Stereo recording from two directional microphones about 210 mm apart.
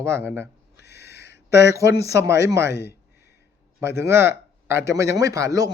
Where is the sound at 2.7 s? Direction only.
50° left (ahead or behind).